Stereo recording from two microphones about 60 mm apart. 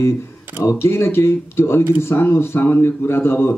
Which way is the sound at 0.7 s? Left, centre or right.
Left.